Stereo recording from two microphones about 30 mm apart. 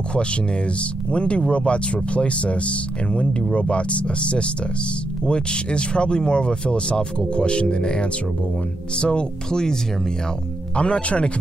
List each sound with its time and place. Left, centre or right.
1.1 s speech: left
5.2 s speech: left
9.5 s speech: left
10.8 s speech: left